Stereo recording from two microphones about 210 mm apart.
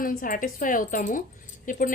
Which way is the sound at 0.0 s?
40° left (ahead or behind).